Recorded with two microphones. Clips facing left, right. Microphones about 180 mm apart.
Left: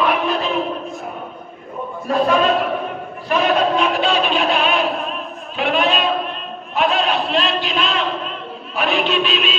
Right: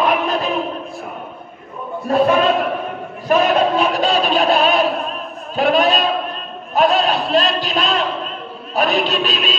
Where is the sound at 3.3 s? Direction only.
40° right (ahead or behind).